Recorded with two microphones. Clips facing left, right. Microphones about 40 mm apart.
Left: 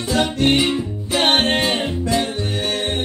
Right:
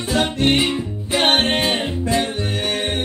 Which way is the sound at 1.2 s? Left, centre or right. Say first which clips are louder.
Even; centre.